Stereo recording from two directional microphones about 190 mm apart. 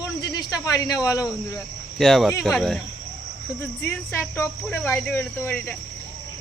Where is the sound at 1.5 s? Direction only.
Centre (ahead or behind).